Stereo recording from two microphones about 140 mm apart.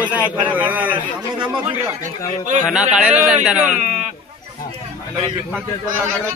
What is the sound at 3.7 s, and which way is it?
Speech, 55° right (ahead or behind).